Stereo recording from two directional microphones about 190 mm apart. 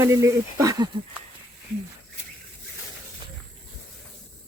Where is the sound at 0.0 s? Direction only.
15° right (ahead or behind).